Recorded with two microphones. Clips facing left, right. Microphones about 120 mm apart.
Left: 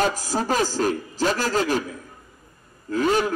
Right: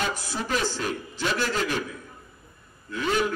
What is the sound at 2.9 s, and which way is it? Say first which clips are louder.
Speech: left 9 dB; 40° left (ahead or behind).